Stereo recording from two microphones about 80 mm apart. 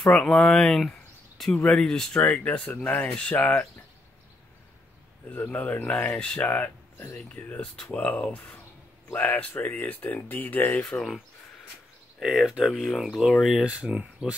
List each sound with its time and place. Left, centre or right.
0.0 s speech: centre
5.3 s speech: left
7.7 s speech: centre
12.2 s speech: centre
13.7 s speech: centre